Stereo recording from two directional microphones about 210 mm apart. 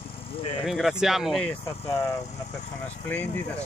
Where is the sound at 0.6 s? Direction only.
Centre (ahead or behind).